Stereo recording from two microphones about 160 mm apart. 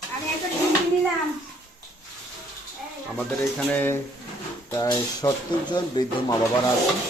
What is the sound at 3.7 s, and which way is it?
Speech, 10° left (ahead or behind).